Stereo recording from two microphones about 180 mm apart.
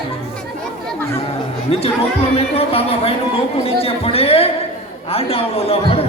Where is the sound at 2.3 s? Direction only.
35° left (ahead or behind).